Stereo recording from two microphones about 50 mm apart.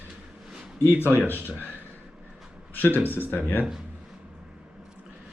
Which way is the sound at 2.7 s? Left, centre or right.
Left.